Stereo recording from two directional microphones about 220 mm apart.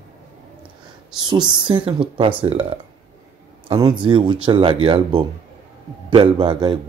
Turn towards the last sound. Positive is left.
turn(degrees=-20)  # may be behind; listen again after turning